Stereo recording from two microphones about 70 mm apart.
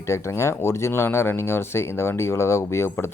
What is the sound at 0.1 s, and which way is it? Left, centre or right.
Speech, left.